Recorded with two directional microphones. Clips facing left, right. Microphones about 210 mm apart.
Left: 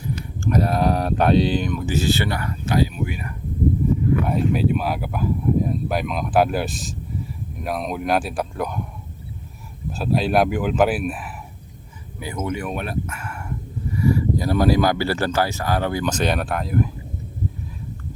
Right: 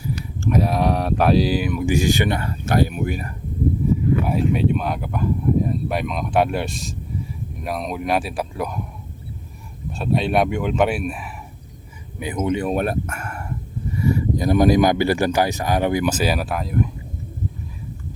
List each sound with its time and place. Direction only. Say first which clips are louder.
0.3 s speech: even; centre (ahead or behind); by 2.6 s 25° right (ahead or behind)
2.6 s speech: right 2 dB; 55° right (ahead or behind)
4.3 s speech: right 1 dB; centre (ahead or behind)
9.9 s speech: even; centre (ahead or behind)
12.2 s speech: right 5 dB; 15° right (ahead or behind)
12.7 s speech: right 5 dB; 50° right (ahead or behind)
14.0 s speech: even; 25° right (ahead or behind); by 16.9 s centre (ahead or behind)